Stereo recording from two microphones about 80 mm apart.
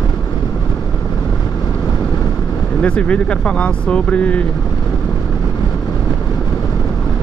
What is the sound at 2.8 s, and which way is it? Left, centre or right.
Speech, centre.